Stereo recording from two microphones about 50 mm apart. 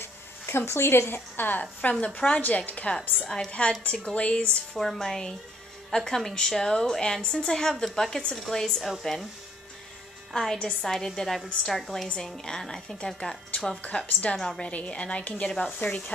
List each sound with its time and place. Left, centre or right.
0.0 s speech: left
1.8 s a woman's voice: left
3.3 s a woman's voice: centre
4.7 s a woman's voice: centre
10.3 s a woman's voice: centre
14.6 s a woman's voice: left
15.8 s speech: left